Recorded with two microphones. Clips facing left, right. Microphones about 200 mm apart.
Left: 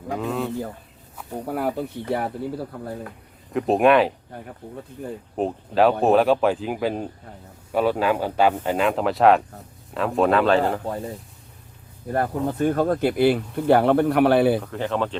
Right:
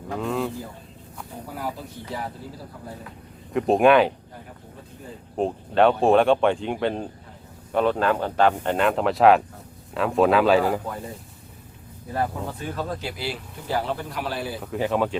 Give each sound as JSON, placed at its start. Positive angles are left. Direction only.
{"t": 0.2, "sound": "speech", "side_deg": 0}
{"t": 1.5, "sound": "speech", "side_deg": 60}
{"t": 3.5, "sound": "speech", "side_deg": 0}
{"t": 5.4, "sound": "speech", "side_deg": 5}
{"t": 12.1, "sound": "speech", "side_deg": 50}
{"t": 14.6, "sound": "speech", "side_deg": -10}